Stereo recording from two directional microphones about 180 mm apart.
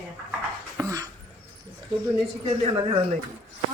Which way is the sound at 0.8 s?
20° right (ahead or behind).